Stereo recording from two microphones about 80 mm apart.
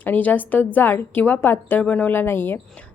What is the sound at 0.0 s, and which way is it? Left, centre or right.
A woman's voice, left.